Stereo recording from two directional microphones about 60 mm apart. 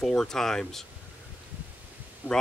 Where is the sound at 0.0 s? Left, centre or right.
Centre.